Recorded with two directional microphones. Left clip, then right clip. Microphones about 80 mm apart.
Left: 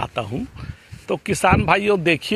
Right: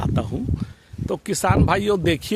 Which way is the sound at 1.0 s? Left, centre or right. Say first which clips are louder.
Left 4 dB; right.